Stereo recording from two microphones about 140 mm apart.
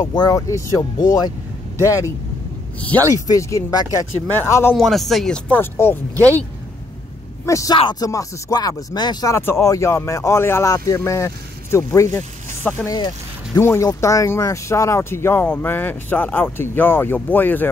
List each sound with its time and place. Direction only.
0.0 s speech: 30° left (ahead or behind)
3.3 s speech: 20° left (ahead or behind)
4.7 s speech: centre (ahead or behind)
7.4 s speech: 25° left (ahead or behind)
9.3 s speech: 20° left (ahead or behind)
12.2 s a sound: 10° left (ahead or behind)
12.8 s speech: 30° left (ahead or behind); by 17.6 s 15° left (ahead or behind)